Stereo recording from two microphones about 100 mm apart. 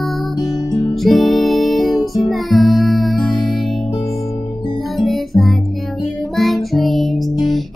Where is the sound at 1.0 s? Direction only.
Centre (ahead or behind).